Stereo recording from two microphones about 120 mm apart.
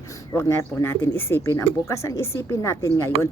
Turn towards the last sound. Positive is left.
turn(degrees=25)  # may be behind; listen again after turning